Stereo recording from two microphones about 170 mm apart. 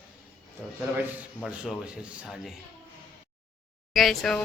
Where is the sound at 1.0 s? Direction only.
10° right (ahead or behind).